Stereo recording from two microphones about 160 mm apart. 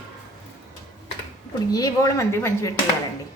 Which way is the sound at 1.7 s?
25° left (ahead or behind).